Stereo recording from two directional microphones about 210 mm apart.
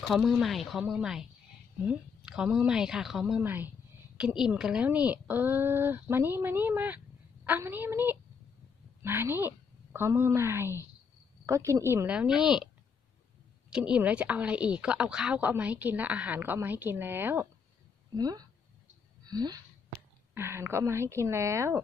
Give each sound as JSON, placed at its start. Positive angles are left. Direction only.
{"t": 0.0, "sound": "a woman's voice", "side_deg": 0}
{"t": 13.7, "sound": "a woman's voice", "side_deg": -5}
{"t": 19.2, "sound": "a sound", "side_deg": -20}
{"t": 20.3, "sound": "a woman's voice", "side_deg": -10}